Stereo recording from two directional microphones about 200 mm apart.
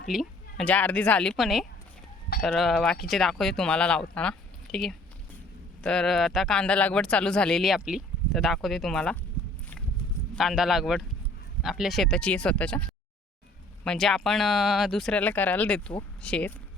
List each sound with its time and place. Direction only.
0.1 s speech: centre (ahead or behind)
9.4 s a sound: 25° left (ahead or behind)
10.3 s speech: centre (ahead or behind)
13.8 s speech: centre (ahead or behind)